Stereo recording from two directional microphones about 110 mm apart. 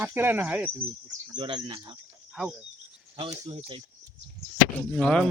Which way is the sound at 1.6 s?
40° right (ahead or behind).